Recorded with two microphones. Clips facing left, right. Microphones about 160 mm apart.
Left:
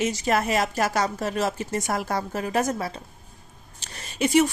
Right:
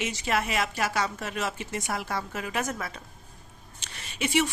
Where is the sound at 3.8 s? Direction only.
40° left (ahead or behind).